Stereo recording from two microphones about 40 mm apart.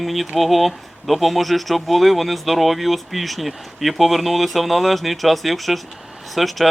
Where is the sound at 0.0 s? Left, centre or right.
Centre.